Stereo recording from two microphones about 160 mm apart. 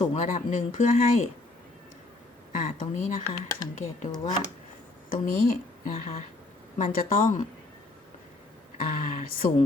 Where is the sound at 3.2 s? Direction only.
20° left (ahead or behind).